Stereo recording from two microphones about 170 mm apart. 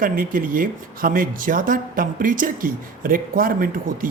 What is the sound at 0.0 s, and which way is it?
A woman's voice, 55° right (ahead or behind).